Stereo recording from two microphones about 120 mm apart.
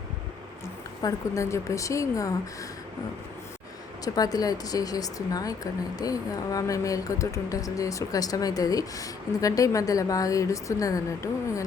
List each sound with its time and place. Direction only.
1.0 s speech: 25° left (ahead or behind)
4.0 s speech: 30° left (ahead or behind)